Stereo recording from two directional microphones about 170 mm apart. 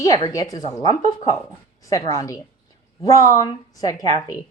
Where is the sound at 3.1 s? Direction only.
20° left (ahead or behind).